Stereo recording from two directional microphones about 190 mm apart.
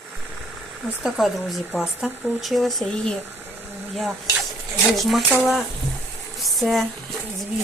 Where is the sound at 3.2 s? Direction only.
10° right (ahead or behind).